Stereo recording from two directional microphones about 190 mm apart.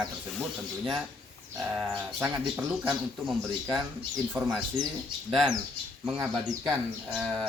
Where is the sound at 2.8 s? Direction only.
Centre (ahead or behind).